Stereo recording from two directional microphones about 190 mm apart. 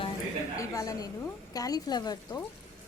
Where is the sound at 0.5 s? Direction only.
15° left (ahead or behind).